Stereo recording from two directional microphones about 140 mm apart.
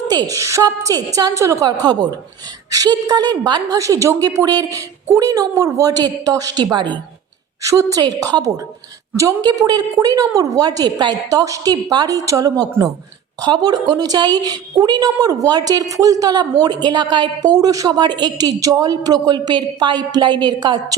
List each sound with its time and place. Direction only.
0.1 s a woman's voice: 25° right (ahead or behind)
7.6 s a woman's voice: 20° right (ahead or behind)